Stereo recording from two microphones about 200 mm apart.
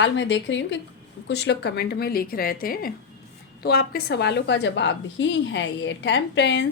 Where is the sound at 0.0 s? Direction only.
65° left (ahead or behind).